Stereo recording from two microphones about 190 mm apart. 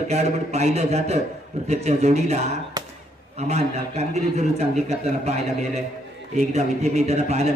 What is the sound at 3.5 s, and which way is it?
A man's voice, 35° right (ahead or behind).